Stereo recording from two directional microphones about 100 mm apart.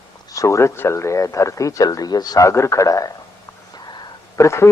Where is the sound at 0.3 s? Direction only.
30° left (ahead or behind).